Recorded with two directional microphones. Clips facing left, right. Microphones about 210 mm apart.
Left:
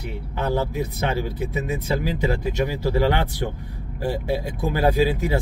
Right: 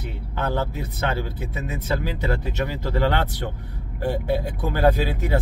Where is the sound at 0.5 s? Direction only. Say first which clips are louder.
Left 4 dB; 10° left (ahead or behind).